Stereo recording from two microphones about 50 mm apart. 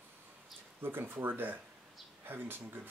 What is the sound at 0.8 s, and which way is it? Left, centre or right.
Speech, right.